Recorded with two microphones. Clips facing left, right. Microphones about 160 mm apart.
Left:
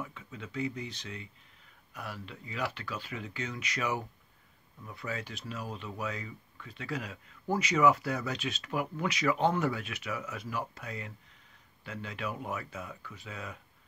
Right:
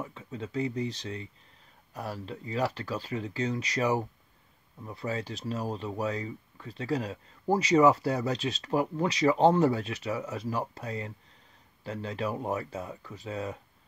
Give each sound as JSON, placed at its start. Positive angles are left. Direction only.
{"t": 0.0, "sound": "speech", "side_deg": -35}